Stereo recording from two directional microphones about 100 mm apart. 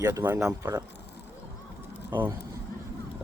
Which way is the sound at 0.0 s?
25° right (ahead or behind).